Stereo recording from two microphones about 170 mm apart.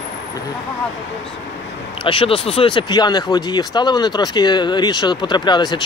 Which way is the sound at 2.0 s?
30° left (ahead or behind).